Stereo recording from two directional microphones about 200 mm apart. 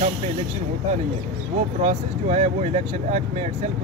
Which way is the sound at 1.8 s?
35° right (ahead or behind).